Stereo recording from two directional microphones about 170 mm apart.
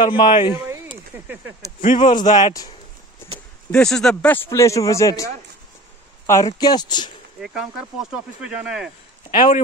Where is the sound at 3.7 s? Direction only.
5° left (ahead or behind).